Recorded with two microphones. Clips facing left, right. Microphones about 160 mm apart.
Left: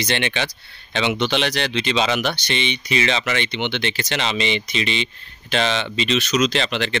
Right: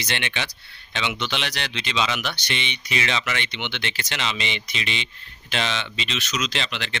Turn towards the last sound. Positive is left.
turn(degrees=40)  # may be behind; listen again after turning